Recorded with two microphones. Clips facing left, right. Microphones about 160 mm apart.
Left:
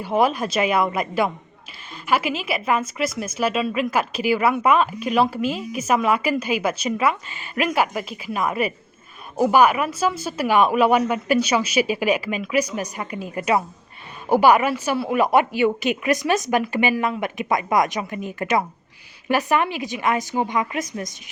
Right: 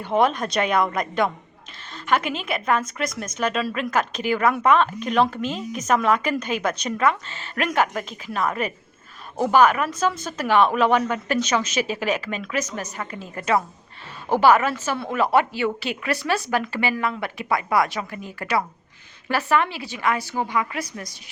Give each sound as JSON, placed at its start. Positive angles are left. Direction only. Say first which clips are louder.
{"t": 0.0, "sound": "a woman's voice", "louder": "left 1 dB", "side_deg": 5}